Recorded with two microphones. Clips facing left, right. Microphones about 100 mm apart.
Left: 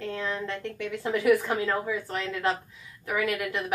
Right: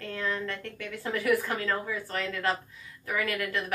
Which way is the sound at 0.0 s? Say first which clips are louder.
Left 1 dB; 20° left (ahead or behind).